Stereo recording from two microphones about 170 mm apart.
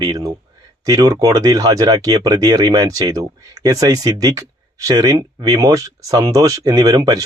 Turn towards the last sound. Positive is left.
turn(degrees=-20)  # may be behind; listen again after turning